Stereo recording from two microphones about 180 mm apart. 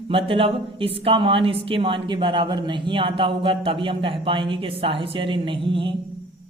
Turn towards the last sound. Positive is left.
turn(degrees=-30)  # may be behind; listen again after turning